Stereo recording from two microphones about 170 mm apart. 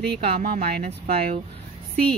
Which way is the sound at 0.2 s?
65° right (ahead or behind).